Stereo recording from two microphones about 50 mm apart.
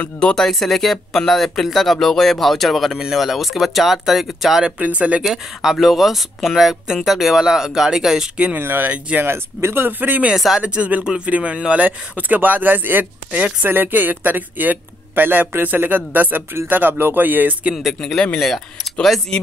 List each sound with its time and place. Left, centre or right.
0.3 s speech: centre
4.7 s speech: right
5.3 s speech: centre
8.5 s speech: right
8.8 s speech: right
9.2 s speech: right
9.8 s speech: right
10.3 s speech: centre
11.1 s speech: right
13.3 s speech: right
13.7 s speech: right
17.7 s speech: centre
19.3 s speech: centre